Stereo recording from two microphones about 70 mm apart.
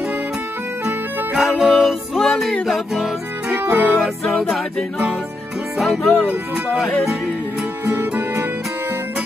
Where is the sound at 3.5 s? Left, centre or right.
Right.